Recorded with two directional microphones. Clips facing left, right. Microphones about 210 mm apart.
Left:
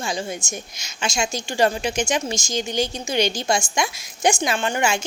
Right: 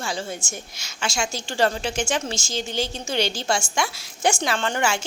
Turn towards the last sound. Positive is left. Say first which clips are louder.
# left 2 dB
turn(degrees=15)  # may be behind; listen again after turning